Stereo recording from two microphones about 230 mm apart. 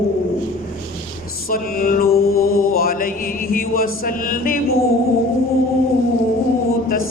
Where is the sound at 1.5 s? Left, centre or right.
Left.